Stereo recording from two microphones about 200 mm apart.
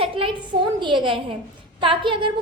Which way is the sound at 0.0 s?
25° right (ahead or behind).